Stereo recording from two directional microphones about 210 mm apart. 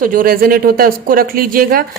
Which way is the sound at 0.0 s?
40° right (ahead or behind).